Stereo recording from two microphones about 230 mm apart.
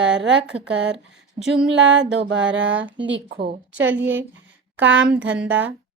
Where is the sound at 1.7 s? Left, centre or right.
Right.